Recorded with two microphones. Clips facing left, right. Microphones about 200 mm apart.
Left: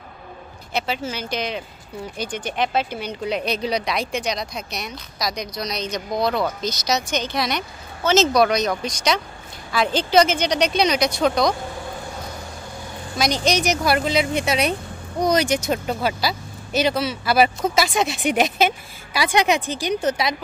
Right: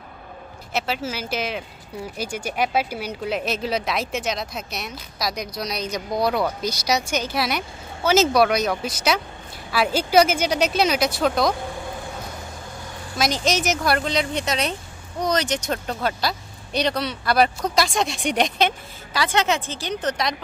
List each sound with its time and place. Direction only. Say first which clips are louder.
0.7 s speech: left 1 dB; 5° right (ahead or behind)
13.2 s a woman's voice: left 2 dB; centre (ahead or behind)